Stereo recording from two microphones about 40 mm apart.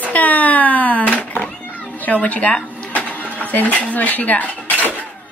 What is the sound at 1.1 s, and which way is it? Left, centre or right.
Cat, left.